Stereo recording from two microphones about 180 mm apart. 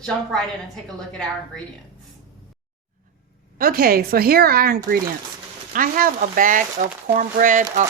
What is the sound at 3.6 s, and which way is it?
Speech, 55° right (ahead or behind).